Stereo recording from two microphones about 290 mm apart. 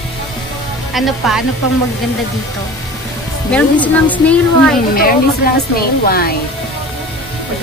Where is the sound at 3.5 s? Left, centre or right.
Centre.